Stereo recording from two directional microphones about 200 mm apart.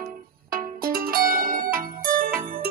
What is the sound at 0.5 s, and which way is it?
Music, 45° right (ahead or behind).